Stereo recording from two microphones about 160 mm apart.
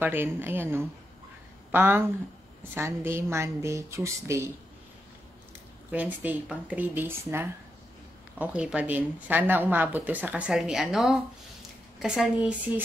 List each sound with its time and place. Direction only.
0.0 s speech: 15° right (ahead or behind)
5.9 s speech: 10° right (ahead or behind)